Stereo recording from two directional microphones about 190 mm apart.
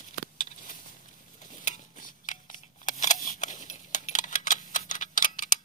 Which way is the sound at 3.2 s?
45° left (ahead or behind).